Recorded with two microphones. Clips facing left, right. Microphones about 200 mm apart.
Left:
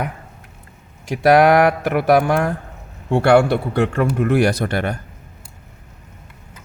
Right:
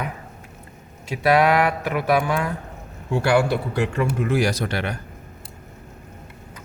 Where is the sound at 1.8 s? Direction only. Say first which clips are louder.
Left 5 dB; 60° left (ahead or behind).